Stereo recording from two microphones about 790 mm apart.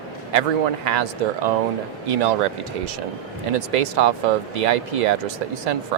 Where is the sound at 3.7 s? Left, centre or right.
Right.